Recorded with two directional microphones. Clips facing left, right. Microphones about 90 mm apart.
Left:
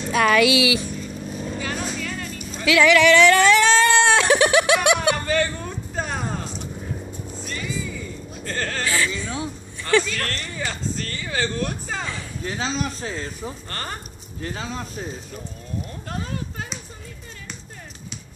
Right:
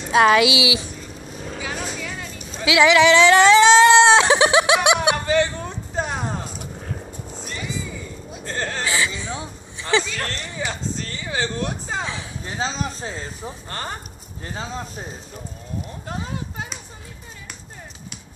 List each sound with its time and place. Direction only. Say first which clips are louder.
0.1 s speech: right 3 dB; 25° right (ahead or behind)
1.6 s vehicle: right 1 dB; 10° right (ahead or behind)
2.6 s a sound: right 1 dB; 20° right (ahead or behind)
7.4 s music: even; 15° right (ahead or behind)
8.3 s a sound: right 1 dB; 20° right (ahead or behind)
10.3 s speech: right 1 dB; 10° right (ahead or behind)
16.1 s speech: right 1 dB; 15° right (ahead or behind)